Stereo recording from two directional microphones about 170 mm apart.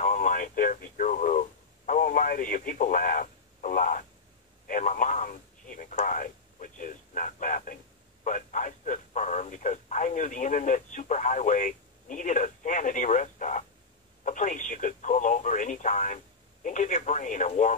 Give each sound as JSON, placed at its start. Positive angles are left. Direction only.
{"t": 0.0, "sound": "radio", "side_deg": 45}
{"t": 8.2, "sound": "a sound", "side_deg": 45}
{"t": 14.2, "sound": "speech", "side_deg": 45}